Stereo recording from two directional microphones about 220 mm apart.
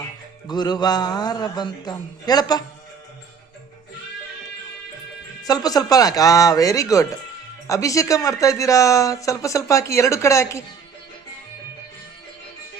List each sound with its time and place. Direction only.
0.4 s a man's voice: 20° left (ahead or behind)
5.4 s speech: 15° left (ahead or behind)